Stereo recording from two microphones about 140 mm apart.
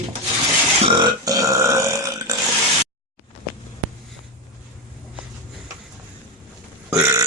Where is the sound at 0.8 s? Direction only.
35° right (ahead or behind).